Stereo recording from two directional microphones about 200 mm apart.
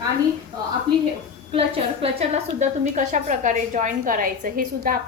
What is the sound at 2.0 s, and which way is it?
A woman's voice, 30° right (ahead or behind).